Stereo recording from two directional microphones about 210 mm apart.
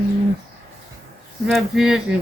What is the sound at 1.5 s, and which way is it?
Speech, 5° right (ahead or behind).